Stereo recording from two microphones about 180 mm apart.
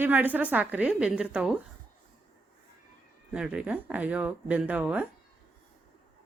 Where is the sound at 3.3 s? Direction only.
5° right (ahead or behind).